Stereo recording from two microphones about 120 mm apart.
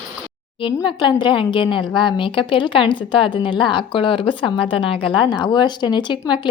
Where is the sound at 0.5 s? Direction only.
45° left (ahead or behind).